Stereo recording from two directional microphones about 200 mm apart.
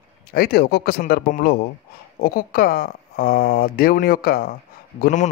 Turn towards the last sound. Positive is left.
turn(degrees=45)  # may be behind; listen again after turning